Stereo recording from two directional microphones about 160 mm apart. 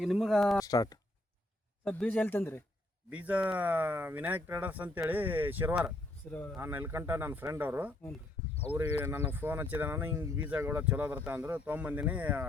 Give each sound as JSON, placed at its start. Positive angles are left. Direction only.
{"t": 0.0, "sound": "speech", "side_deg": 0}
{"t": 0.6, "sound": "speech", "side_deg": 20}
{"t": 1.8, "sound": "speech", "side_deg": 5}
{"t": 3.1, "sound": "speech", "side_deg": -10}
{"t": 6.2, "sound": "speech", "side_deg": 10}
{"t": 6.6, "sound": "speech", "side_deg": -15}